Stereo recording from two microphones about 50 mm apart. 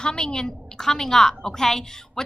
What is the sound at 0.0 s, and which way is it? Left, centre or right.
A woman's voice, centre.